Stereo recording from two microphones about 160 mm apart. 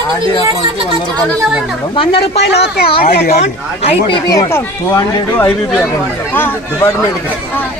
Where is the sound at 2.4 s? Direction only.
90° left.